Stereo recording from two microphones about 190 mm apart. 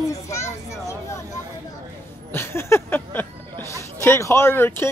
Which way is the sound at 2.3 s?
15° left (ahead or behind).